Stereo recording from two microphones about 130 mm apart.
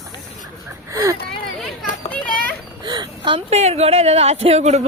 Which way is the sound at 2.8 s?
35° right (ahead or behind).